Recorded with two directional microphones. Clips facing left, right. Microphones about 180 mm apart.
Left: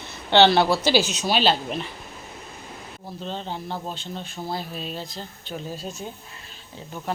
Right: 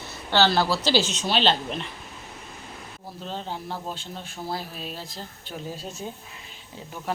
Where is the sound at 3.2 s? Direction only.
5° right (ahead or behind).